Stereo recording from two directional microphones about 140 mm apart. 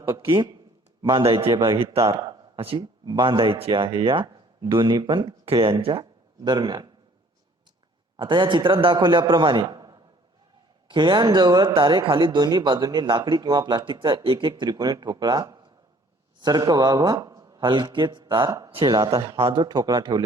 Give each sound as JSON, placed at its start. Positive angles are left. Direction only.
{"t": 0.3, "sound": "speech", "side_deg": -35}
{"t": 1.5, "sound": "a man's voice", "side_deg": -25}
{"t": 2.1, "sound": "speech", "side_deg": -40}
{"t": 8.1, "sound": "a man's voice", "side_deg": -35}